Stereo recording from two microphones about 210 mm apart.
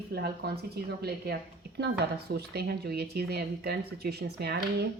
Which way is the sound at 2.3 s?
50° right (ahead or behind).